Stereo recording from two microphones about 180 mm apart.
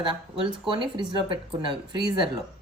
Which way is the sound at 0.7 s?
30° right (ahead or behind).